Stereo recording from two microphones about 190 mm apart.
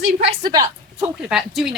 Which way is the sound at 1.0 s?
5° right (ahead or behind).